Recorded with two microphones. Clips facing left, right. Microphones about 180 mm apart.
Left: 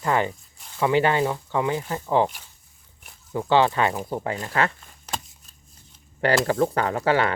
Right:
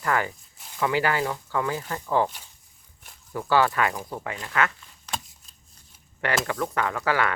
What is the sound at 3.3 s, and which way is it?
Speech, 20° left (ahead or behind).